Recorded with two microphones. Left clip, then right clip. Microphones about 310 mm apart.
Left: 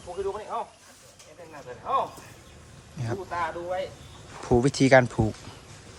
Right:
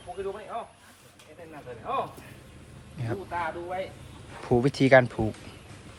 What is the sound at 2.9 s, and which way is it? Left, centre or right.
Speech, centre.